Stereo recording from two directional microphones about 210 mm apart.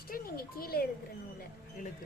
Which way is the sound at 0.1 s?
45° left (ahead or behind).